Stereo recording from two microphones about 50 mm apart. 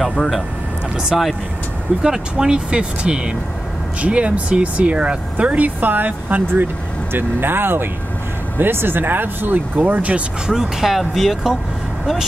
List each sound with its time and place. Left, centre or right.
1.0 s speech: centre; by 10.2 s right
10.4 s speech: centre